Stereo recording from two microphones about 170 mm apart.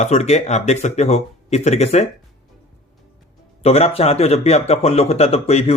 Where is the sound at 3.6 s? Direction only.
35° left (ahead or behind).